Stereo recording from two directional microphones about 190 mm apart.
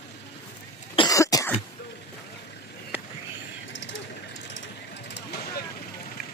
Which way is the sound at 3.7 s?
75° left (ahead or behind).